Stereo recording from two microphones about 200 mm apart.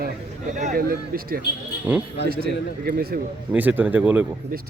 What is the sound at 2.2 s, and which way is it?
Speech, 50° right (ahead or behind).